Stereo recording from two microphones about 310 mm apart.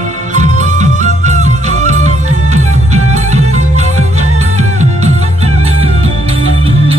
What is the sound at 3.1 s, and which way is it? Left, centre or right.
Music, right.